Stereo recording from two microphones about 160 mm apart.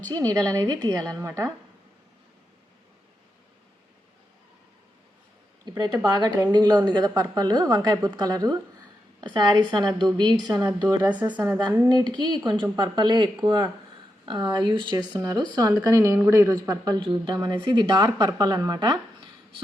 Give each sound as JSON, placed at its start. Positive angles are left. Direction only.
{"t": 0.0, "sound": "a woman's voice", "side_deg": -25}
{"t": 5.7, "sound": "a woman's voice", "side_deg": -25}
{"t": 10.6, "sound": "a woman's voice", "side_deg": -10}
{"t": 11.9, "sound": "a woman's voice", "side_deg": -25}
{"t": 16.6, "sound": "a woman's voice", "side_deg": -25}